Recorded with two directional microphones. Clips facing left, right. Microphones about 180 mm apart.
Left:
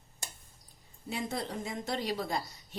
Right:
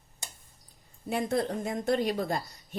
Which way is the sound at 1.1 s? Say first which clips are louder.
Right 7 dB; 55° right (ahead or behind).